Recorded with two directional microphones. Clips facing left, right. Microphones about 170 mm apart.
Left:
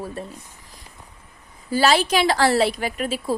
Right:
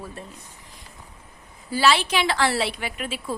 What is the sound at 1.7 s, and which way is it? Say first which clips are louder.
A woman's voice: left 3 dB; 40° left (ahead or behind).